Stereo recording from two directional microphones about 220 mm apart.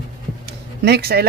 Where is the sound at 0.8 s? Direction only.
45° right (ahead or behind).